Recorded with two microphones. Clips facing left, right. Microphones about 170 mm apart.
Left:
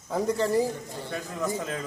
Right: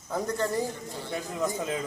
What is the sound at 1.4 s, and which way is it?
Speech, 15° right (ahead or behind).